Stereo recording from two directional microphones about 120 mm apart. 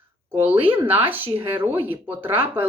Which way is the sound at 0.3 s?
15° right (ahead or behind).